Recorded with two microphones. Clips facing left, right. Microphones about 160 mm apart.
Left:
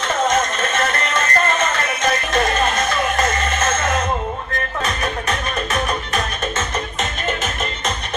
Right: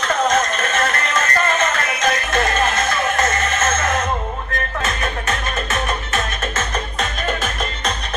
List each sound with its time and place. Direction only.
0.5 s music: 30° left (ahead or behind)